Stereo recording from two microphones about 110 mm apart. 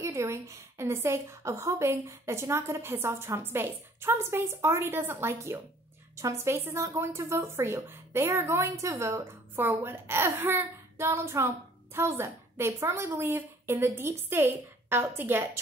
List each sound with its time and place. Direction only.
0.0 s a woman's voice: 25° right (ahead or behind)